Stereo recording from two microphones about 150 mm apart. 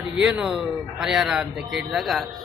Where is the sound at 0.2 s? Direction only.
5° right (ahead or behind).